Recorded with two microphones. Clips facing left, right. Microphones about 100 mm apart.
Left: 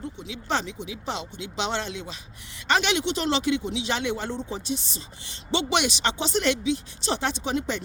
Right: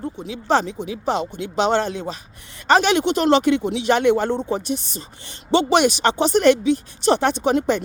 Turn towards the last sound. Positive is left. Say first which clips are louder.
# right 9 dB
turn(degrees=-55)  # may be behind; listen again after turning